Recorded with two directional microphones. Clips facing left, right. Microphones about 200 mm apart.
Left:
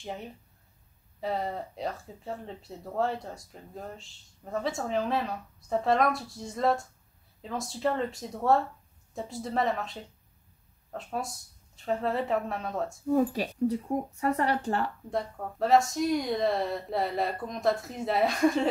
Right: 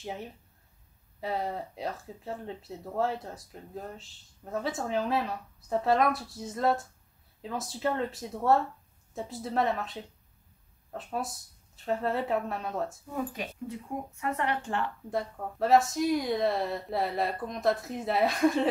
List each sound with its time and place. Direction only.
0.0 s speech: centre (ahead or behind)
13.1 s speech: 35° left (ahead or behind)
15.0 s speech: centre (ahead or behind)